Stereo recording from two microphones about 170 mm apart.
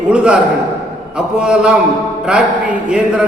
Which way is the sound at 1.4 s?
5° right (ahead or behind).